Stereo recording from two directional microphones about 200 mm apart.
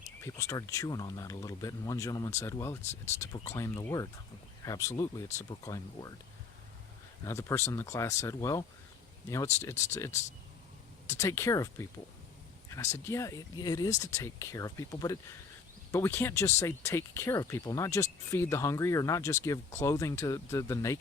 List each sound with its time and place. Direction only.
0.2 s speech: 15° left (ahead or behind)
7.3 s speech: 15° left (ahead or behind)
13.1 s speech: 15° left (ahead or behind)